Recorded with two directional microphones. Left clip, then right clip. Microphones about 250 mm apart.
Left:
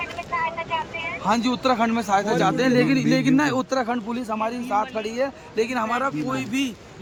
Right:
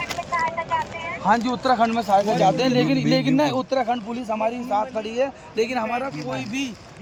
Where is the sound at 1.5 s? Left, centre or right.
Left.